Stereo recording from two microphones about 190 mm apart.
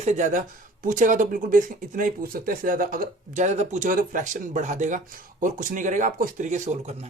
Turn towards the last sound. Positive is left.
turn(degrees=-40)  # may be behind; listen again after turning